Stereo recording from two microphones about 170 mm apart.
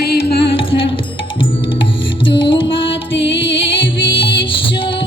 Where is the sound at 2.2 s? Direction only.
30° left (ahead or behind).